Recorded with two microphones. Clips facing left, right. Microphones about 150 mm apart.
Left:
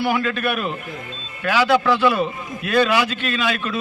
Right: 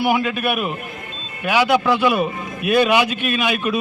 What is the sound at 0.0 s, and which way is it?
A man's voice, 15° right (ahead or behind).